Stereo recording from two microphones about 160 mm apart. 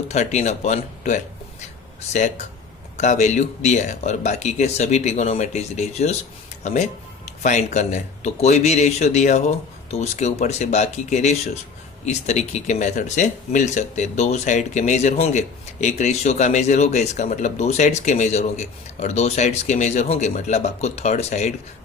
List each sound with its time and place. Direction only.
0.1 s speech: 45° left (ahead or behind)
3.0 s speech: 45° left (ahead or behind)